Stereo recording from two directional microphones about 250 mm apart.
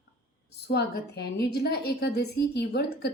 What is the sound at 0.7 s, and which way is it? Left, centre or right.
A woman's voice, left.